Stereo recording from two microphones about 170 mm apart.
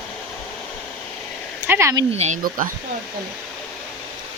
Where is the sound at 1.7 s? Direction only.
15° right (ahead or behind).